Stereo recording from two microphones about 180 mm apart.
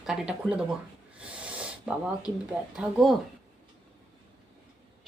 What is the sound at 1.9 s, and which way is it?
Speech, 5° right (ahead or behind).